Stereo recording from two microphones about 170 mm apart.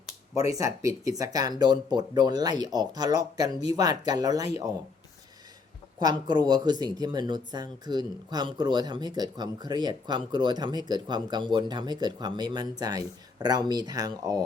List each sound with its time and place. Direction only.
0.3 s speech: 20° right (ahead or behind)
6.0 s speech: 25° right (ahead or behind)